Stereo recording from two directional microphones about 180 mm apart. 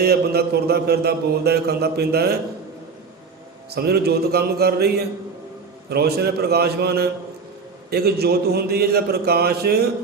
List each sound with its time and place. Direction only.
0.0 s mantra: 60° right (ahead or behind)
3.7 s mantra: 60° right (ahead or behind)